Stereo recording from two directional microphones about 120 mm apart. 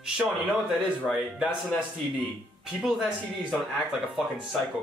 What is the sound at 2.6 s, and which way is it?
Speech, 5° right (ahead or behind).